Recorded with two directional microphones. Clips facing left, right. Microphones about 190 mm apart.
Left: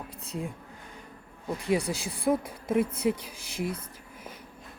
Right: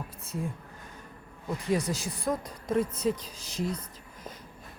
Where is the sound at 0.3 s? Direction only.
15° left (ahead or behind).